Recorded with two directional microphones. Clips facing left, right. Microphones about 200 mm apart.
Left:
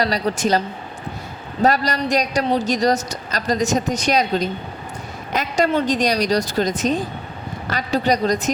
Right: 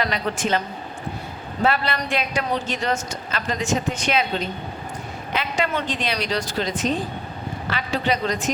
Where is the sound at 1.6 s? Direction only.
40° left (ahead or behind).